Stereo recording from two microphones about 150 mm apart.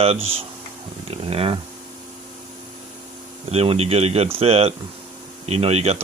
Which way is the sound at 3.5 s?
45° right (ahead or behind).